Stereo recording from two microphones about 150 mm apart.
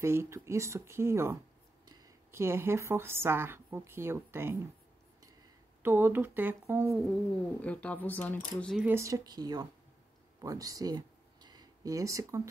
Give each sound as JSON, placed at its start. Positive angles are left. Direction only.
{"t": 0.0, "sound": "a woman's voice", "side_deg": -15}
{"t": 5.8, "sound": "speech", "side_deg": -15}
{"t": 7.6, "sound": "speech", "side_deg": 10}
{"t": 8.8, "sound": "speech", "side_deg": -20}